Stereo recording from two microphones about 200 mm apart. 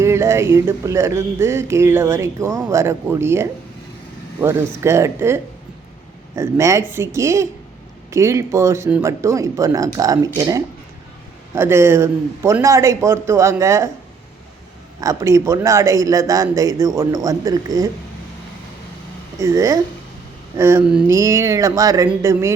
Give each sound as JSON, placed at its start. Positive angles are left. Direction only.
{"t": 0.0, "sound": "speech", "side_deg": -15}
{"t": 15.0, "sound": "speech", "side_deg": -15}
{"t": 19.4, "sound": "speech", "side_deg": -15}